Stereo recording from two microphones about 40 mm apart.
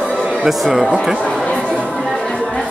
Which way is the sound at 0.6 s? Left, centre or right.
Centre.